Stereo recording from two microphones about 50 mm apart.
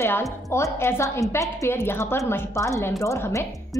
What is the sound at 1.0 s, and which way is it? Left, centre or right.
Speech, left.